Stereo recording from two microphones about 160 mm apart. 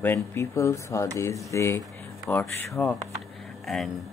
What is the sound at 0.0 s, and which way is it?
Speech, 15° left (ahead or behind).